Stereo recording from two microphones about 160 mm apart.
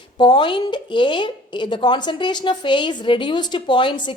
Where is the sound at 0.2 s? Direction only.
30° left (ahead or behind).